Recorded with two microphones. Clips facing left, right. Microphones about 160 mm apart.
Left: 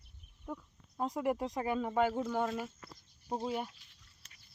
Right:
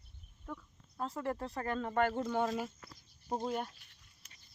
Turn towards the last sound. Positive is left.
turn(degrees=5)  # may be behind; listen again after turning